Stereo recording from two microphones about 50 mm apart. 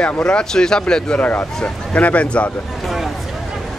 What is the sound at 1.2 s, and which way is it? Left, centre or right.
Speech, left.